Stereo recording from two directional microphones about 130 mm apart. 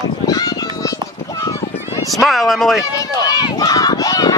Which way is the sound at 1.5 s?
25° left (ahead or behind).